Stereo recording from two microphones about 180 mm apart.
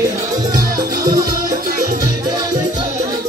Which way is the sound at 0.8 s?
20° right (ahead or behind).